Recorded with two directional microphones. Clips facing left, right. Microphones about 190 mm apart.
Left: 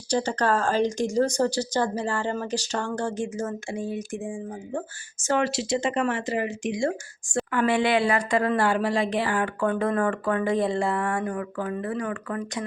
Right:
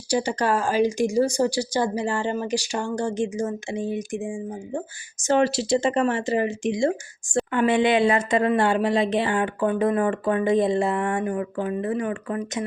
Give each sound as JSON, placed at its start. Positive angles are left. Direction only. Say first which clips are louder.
{"t": 0.1, "sound": "speech", "louder": "right 1 dB", "side_deg": -10}
{"t": 5.4, "sound": "speech", "louder": "right 6 dB", "side_deg": -35}